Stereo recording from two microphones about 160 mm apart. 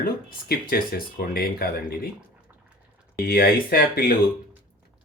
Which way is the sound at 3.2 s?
70° left (ahead or behind).